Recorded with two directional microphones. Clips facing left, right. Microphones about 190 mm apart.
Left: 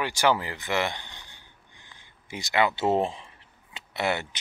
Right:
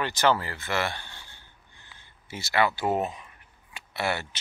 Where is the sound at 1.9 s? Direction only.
15° left (ahead or behind).